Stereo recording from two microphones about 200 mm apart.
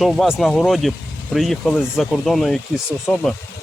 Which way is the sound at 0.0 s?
Centre (ahead or behind).